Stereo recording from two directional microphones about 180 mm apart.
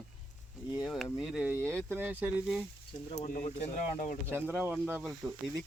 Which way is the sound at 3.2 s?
45° left (ahead or behind).